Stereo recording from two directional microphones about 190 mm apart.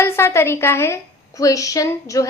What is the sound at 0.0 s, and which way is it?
A woman's voice, 15° left (ahead or behind).